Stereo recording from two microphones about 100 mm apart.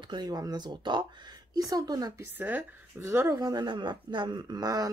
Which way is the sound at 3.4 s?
40° right (ahead or behind).